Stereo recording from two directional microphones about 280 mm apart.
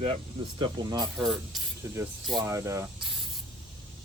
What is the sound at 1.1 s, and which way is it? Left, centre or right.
Speech, centre.